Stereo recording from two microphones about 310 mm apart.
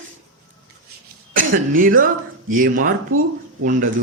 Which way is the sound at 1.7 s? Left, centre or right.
Right.